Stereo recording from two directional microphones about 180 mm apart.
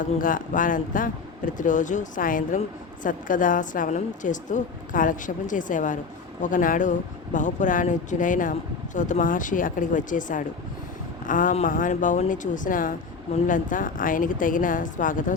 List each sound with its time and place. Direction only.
0.0 s a woman's voice: 50° left (ahead or behind)